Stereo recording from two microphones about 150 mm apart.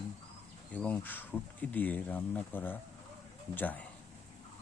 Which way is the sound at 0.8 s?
10° left (ahead or behind).